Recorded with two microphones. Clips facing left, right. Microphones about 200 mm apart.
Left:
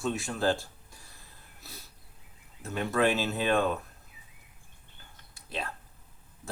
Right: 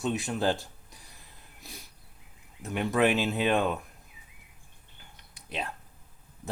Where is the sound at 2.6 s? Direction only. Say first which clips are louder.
Right 2 dB; 15° right (ahead or behind).